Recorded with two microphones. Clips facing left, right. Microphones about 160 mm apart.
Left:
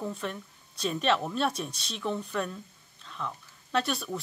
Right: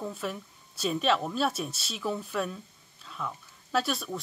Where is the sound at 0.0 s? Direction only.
5° right (ahead or behind).